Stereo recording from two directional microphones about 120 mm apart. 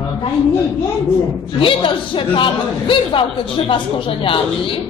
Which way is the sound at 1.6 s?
45° left (ahead or behind).